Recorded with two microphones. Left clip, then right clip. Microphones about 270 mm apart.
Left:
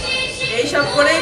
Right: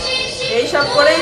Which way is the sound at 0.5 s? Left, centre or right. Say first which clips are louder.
Right 3 dB; right.